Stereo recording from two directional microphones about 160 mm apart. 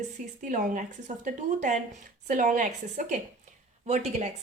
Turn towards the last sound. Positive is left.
turn(degrees=-45)  # may be behind; listen again after turning